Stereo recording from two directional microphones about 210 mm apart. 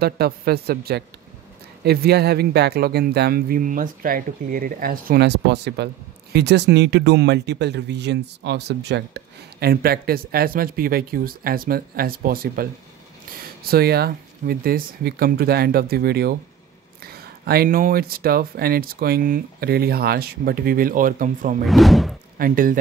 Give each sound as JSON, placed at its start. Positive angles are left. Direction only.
{"t": 0.0, "sound": "speech", "side_deg": -50}
{"t": 13.7, "sound": "speech", "side_deg": -50}
{"t": 21.6, "sound": "speech", "side_deg": 0}
{"t": 22.4, "sound": "speech", "side_deg": -40}